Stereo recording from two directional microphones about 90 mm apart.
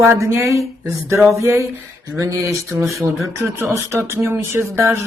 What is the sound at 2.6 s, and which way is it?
Speech, centre (ahead or behind).